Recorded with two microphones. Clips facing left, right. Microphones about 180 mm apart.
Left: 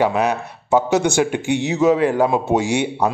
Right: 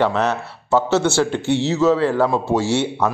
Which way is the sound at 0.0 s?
10° left (ahead or behind).